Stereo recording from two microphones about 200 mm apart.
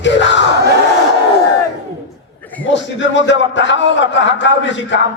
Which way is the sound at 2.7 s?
65° left (ahead or behind).